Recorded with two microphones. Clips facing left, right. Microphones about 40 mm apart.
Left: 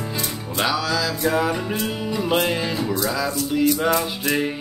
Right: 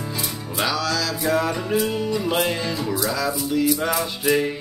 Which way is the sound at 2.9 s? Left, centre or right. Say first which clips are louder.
Even; centre.